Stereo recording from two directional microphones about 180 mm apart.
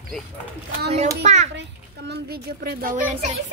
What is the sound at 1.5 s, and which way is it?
A child's voice, 70° right (ahead or behind).